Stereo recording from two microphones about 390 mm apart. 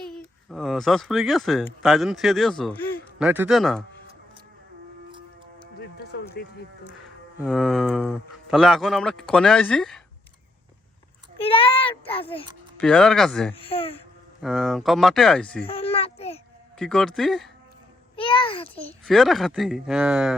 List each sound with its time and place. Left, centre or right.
0.0 s speech: centre
5.8 s music: left
7.3 s speech: centre
11.4 s a sound: centre
12.7 s speech: centre
13.6 s a child's voice: centre
14.4 s speech: centre
15.6 s a sound: centre
16.7 s speech: centre
18.2 s a child's voice: centre